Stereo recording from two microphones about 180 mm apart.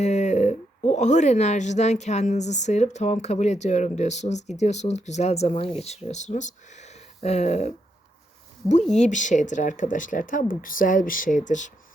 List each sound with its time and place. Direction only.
0.0 s speech: 40° left (ahead or behind)
9.0 s speech: 45° left (ahead or behind)